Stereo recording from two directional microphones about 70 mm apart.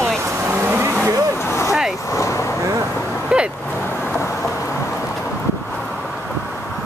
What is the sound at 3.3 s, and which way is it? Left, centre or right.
Vehicle, centre.